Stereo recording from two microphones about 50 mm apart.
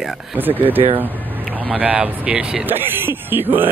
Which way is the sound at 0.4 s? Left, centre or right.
Right.